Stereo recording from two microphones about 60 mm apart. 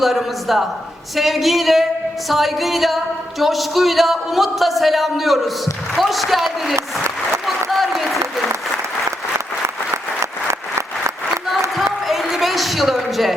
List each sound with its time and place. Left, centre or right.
0.0 s a man's voice: centre
7.4 s applause: centre
10.5 s applause: right
12.0 s a sound: centre